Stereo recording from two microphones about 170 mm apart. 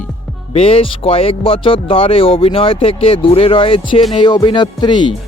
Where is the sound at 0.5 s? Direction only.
35° left (ahead or behind).